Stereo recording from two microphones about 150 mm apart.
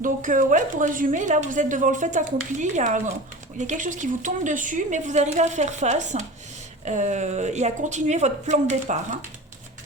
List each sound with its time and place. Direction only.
0.0 s a woman's voice: 60° right (ahead or behind)